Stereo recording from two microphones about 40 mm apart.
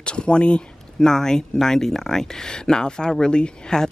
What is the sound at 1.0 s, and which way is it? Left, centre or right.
Speech, centre.